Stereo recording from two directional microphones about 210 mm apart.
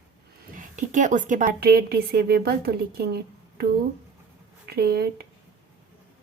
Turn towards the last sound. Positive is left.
turn(degrees=-45)  # may be behind; listen again after turning